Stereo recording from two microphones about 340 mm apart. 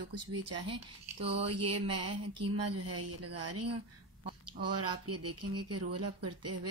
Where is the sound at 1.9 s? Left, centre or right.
Right.